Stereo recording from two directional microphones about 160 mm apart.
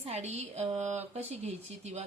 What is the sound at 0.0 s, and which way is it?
Speech, 45° right (ahead or behind).